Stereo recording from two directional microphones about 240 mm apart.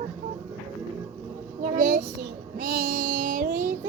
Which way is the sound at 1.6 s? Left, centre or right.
Right.